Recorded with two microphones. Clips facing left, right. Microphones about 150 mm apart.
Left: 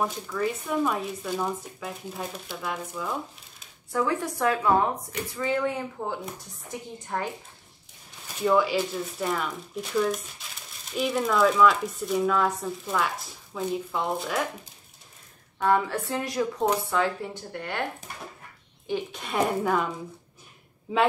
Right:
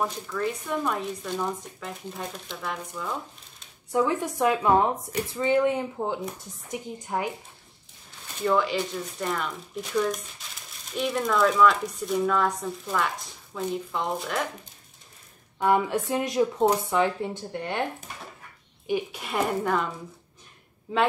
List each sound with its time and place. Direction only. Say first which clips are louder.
0.0 s speech: left 1 dB; 5° left (ahead or behind)
3.9 s a woman's voice: right 2 dB; 20° right (ahead or behind)
8.4 s speech: left 2 dB; 5° left (ahead or behind)
15.6 s speech: right 1 dB; 15° right (ahead or behind)
18.9 s a woman's voice: right 2 dB; 15° right (ahead or behind)
19.2 s speech: left 3 dB; centre (ahead or behind)